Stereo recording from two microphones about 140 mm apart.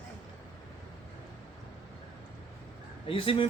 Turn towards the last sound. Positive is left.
turn(degrees=40)  # may be behind; listen again after turning